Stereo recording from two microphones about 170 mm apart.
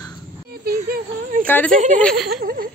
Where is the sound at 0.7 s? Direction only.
60° right (ahead or behind).